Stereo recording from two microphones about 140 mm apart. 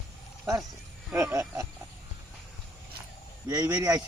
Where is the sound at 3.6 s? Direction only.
20° right (ahead or behind).